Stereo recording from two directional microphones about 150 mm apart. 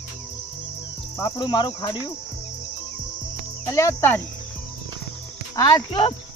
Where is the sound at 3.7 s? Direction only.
20° left (ahead or behind).